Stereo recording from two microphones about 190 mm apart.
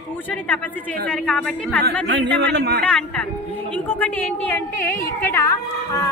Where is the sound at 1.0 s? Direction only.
5° left (ahead or behind).